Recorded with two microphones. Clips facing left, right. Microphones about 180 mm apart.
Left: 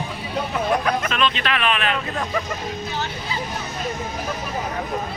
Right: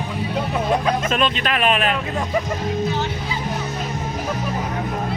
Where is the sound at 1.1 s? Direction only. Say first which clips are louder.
Right 2 dB; 45° right (ahead or behind).